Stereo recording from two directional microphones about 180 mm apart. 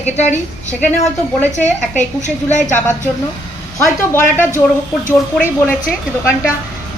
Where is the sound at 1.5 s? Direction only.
40° left (ahead or behind).